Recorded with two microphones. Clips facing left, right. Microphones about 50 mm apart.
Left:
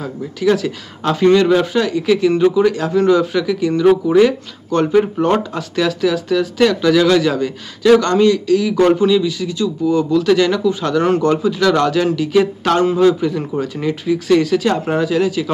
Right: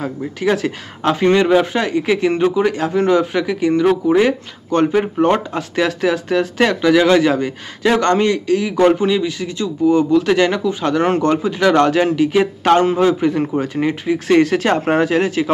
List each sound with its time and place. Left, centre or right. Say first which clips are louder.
1.0 s speech: left 2 dB; right
1.7 s speech: left 2 dB; right
4.9 s speech: left 3 dB; centre
5.5 s speech: even; right
6.8 s speech: right 3 dB; right